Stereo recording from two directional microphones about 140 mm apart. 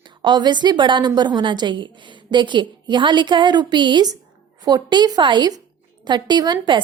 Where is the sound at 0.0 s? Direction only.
35° right (ahead or behind).